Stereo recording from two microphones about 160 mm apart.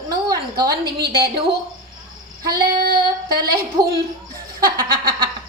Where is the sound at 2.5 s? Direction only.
70° right (ahead or behind).